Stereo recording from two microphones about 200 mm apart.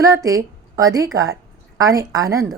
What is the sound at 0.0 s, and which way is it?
A woman's voice, 15° right (ahead or behind).